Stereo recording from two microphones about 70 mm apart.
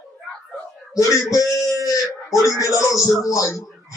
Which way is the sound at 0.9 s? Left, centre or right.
Left.